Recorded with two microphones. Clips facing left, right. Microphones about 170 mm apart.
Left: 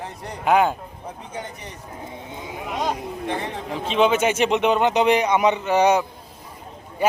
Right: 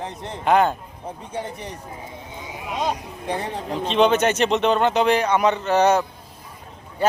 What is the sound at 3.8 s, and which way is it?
Speech, 5° left (ahead or behind).